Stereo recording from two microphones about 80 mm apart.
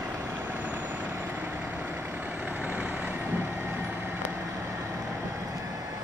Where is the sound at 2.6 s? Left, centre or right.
Centre.